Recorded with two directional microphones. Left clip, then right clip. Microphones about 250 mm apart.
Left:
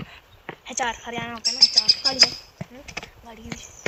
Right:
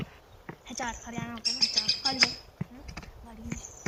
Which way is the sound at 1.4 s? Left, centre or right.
Centre.